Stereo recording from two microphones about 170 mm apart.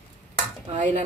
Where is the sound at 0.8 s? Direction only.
45° right (ahead or behind).